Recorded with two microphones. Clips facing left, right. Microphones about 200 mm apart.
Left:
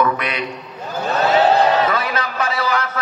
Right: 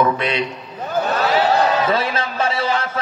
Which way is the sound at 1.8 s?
30° right (ahead or behind).